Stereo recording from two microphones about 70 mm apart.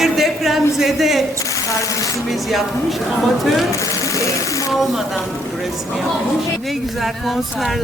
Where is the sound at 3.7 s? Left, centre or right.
Left.